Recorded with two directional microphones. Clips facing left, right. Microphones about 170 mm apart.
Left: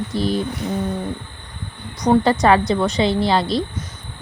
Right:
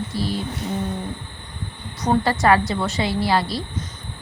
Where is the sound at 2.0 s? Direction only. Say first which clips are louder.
Left 3 dB; 20° left (ahead or behind).